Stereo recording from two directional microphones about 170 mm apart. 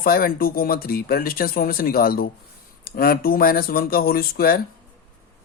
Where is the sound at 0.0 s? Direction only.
60° left (ahead or behind).